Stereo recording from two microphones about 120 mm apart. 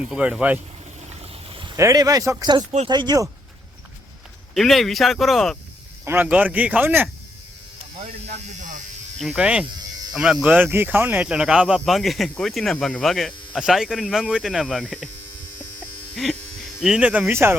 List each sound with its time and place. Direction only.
0.1 s speech: 10° right (ahead or behind)
1.2 s a sound: 55° right (ahead or behind)
1.7 s speech: 25° right (ahead or behind)
4.5 s speech: centre (ahead or behind)
6.1 s speech: 15° right (ahead or behind)
8.3 s hum: 90° right
9.2 s speech: 5° right (ahead or behind)
16.1 s speech: 5° left (ahead or behind); by 17.5 s 20° right (ahead or behind)